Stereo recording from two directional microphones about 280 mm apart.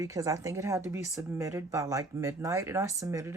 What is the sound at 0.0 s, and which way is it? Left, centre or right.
Speech, centre.